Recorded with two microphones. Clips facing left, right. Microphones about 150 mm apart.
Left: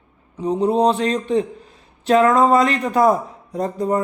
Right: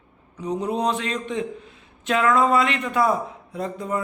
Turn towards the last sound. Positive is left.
turn(degrees=40)  # may be behind; listen again after turning